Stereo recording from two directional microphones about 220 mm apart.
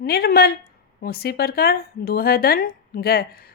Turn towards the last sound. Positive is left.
turn(degrees=45)  # may be behind; listen again after turning